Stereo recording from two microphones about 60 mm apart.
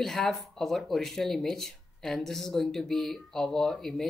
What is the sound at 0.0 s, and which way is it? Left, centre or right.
Speech, centre.